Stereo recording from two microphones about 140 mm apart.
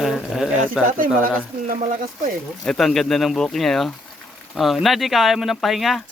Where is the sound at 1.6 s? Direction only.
70° right (ahead or behind).